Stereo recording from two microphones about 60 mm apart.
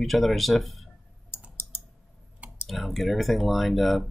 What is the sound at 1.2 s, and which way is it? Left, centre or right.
Typing, left.